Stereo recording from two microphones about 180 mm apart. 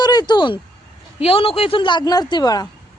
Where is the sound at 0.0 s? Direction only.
25° left (ahead or behind).